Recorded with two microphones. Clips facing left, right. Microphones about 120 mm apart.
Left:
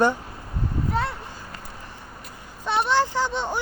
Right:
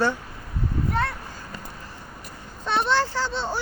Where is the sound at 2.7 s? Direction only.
15° left (ahead or behind).